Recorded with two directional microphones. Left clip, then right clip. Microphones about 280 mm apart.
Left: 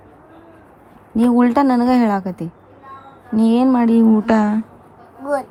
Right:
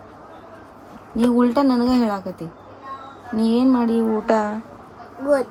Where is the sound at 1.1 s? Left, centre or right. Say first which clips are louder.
Left 3 dB; left.